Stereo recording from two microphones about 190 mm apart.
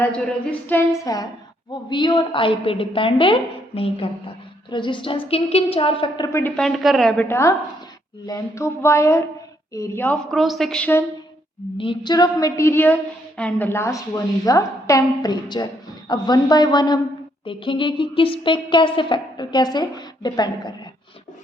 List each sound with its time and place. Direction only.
0.7 s a woman's voice: 15° left (ahead or behind)
6.6 s a woman's voice: centre (ahead or behind)
10.3 s a woman's voice: centre (ahead or behind)
11.8 s a woman's voice: 25° left (ahead or behind)